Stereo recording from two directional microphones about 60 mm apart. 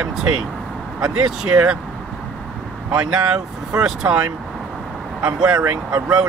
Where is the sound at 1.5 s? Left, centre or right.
Centre.